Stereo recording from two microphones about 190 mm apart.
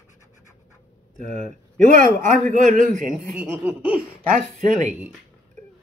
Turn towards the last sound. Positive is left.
turn(degrees=-40)  # may be behind; listen again after turning